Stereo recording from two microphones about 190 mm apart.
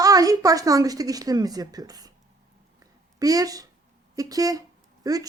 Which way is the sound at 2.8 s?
20° right (ahead or behind).